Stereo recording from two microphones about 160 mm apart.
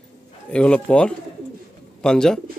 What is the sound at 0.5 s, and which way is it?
A man's voice, 5° left (ahead or behind).